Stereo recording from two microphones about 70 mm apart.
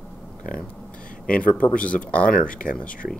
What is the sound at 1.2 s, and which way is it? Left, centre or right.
Speech, centre.